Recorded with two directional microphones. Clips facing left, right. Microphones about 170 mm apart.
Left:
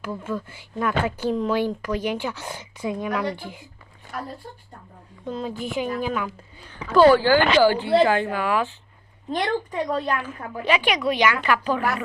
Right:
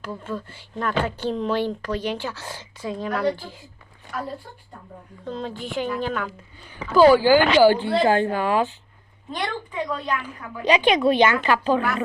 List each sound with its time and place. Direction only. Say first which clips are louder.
0.0 s speech: left 2 dB; 10° left (ahead or behind)
5.2 s a woman's voice: left 2 dB; 5° left (ahead or behind)
6.9 s speech: right 1 dB; 10° right (ahead or behind)
8.0 s speech: right 2 dB; 35° right (ahead or behind)
9.3 s a woman's voice: left 4 dB; 45° left (ahead or behind)
10.7 s a woman's voice: right 4 dB; 20° right (ahead or behind)